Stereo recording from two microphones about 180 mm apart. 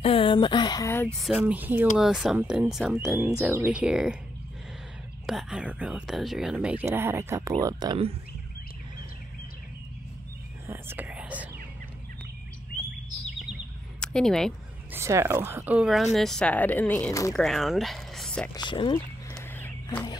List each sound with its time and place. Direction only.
0.0 s speech: 30° left (ahead or behind)
1.0 s speech: centre (ahead or behind)
5.2 s speech: centre (ahead or behind); by 8.1 s 25° right (ahead or behind)
10.7 s whispering: 10° right (ahead or behind)
13.9 s speech: 5° left (ahead or behind)
14.9 s speech: 15° right (ahead or behind); by 17.3 s 15° left (ahead or behind)
17.3 s speech: centre (ahead or behind)
18.5 s speech: 25° left (ahead or behind)
19.5 s walk: 10° left (ahead or behind)